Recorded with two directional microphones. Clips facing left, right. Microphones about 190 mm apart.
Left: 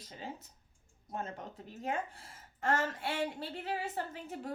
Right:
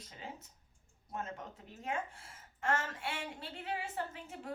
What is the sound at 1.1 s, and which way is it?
Speech, 30° left (ahead or behind).